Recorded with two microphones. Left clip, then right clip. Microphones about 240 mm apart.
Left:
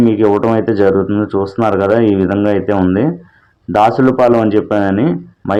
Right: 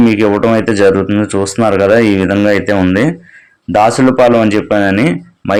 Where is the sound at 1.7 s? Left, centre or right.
Right.